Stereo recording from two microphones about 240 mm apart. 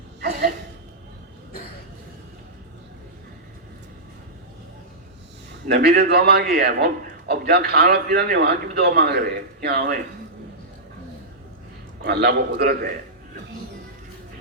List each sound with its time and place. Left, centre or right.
5.6 s a man's voice: right
12.0 s a man's voice: right